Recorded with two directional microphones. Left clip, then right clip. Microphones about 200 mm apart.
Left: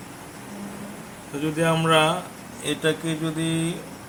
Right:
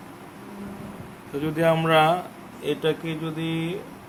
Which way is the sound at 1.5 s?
25° right (ahead or behind).